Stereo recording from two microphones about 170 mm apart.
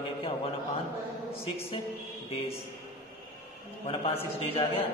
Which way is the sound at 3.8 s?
35° left (ahead or behind).